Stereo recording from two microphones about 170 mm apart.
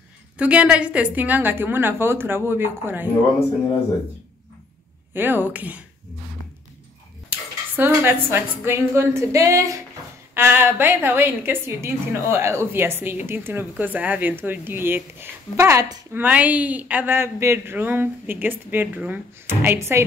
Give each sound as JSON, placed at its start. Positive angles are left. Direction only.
{"t": 0.4, "sound": "a woman's voice", "side_deg": -5}
{"t": 5.1, "sound": "a woman's voice", "side_deg": -10}
{"t": 7.2, "sound": "a woman's voice", "side_deg": -10}